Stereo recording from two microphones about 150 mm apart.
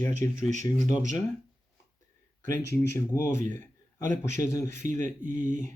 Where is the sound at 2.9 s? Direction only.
15° left (ahead or behind).